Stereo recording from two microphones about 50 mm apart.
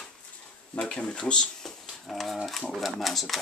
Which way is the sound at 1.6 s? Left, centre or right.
Centre.